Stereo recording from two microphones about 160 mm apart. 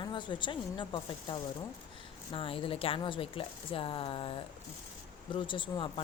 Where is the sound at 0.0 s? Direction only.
30° left (ahead or behind).